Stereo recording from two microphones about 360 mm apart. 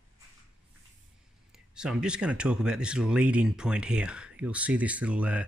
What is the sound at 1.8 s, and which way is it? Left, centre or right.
Speech, centre.